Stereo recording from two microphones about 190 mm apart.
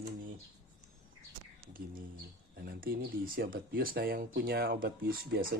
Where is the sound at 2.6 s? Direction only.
50° right (ahead or behind).